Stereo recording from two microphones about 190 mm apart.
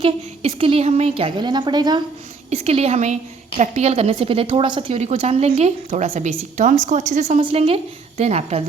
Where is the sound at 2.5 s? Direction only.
35° right (ahead or behind).